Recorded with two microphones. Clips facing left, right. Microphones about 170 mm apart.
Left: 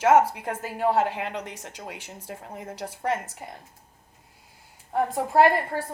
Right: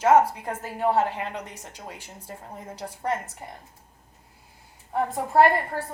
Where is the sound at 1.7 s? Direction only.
75° left (ahead or behind).